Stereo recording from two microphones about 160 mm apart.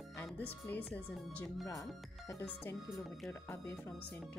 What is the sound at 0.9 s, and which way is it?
Speech, 10° left (ahead or behind).